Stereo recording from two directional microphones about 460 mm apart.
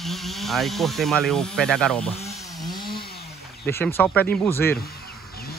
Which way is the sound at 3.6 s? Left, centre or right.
Centre.